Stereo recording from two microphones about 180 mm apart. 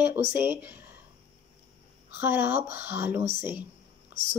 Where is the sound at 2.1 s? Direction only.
10° right (ahead or behind).